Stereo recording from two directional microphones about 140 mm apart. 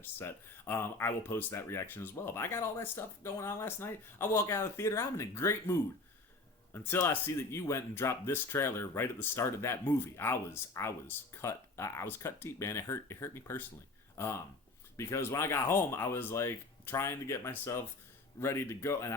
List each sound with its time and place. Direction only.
0.0 s speech: 15° left (ahead or behind)
6.7 s speech: 15° left (ahead or behind)